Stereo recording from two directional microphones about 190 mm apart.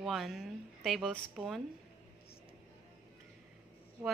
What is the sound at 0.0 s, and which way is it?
A woman's voice, centre (ahead or behind).